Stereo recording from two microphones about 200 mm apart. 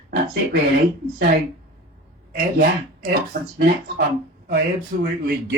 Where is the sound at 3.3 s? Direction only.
50° right (ahead or behind).